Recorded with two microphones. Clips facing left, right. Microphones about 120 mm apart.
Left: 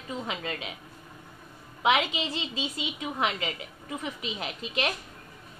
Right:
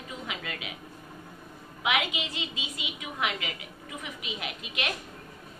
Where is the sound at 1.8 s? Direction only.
30° left (ahead or behind).